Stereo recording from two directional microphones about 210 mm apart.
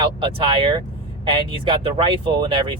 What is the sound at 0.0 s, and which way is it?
Speech, 25° right (ahead or behind).